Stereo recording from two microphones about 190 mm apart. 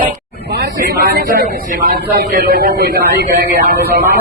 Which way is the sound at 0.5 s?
55° right (ahead or behind).